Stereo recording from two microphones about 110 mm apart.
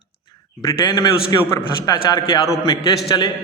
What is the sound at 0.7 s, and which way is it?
A man's voice, 30° left (ahead or behind).